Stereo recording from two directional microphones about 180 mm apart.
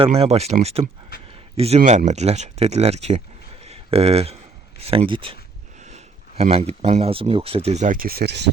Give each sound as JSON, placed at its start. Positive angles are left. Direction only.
{"t": 0.0, "sound": "speech", "side_deg": -35}